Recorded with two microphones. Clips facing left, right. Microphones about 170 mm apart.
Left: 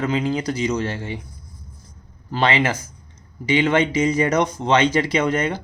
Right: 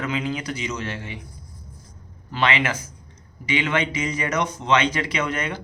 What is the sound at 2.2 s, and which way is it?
Speech, 35° left (ahead or behind).